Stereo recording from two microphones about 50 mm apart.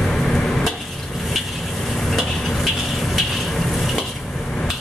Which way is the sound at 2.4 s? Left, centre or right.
Centre.